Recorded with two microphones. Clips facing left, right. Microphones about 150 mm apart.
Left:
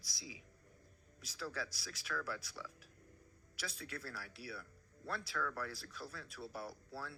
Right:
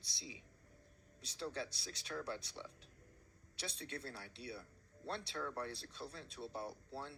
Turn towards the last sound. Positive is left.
turn(degrees=-25)  # may be behind; listen again after turning